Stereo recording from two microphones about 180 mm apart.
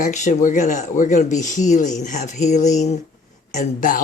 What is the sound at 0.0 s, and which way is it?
Speech, 45° left (ahead or behind).